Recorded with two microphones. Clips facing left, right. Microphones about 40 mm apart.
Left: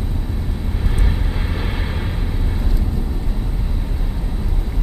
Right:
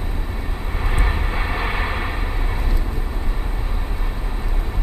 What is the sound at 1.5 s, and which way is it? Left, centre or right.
Vehicle, right.